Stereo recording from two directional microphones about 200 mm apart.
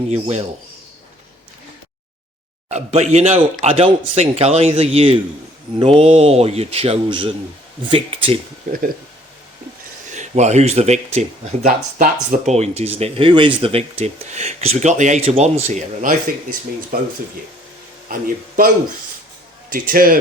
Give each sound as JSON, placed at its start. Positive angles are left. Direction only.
{"t": 0.1, "sound": "speech", "side_deg": -35}
{"t": 2.6, "sound": "a man's voice", "side_deg": -35}
{"t": 10.1, "sound": "speech", "side_deg": -35}
{"t": 18.1, "sound": "speech", "side_deg": -45}
{"t": 19.7, "sound": "speech", "side_deg": -45}